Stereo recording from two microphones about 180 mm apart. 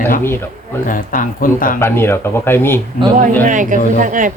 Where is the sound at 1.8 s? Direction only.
15° left (ahead or behind).